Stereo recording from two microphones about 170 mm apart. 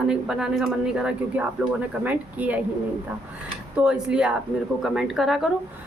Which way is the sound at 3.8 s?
5° right (ahead or behind).